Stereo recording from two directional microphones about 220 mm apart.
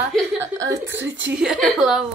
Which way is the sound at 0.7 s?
55° right (ahead or behind).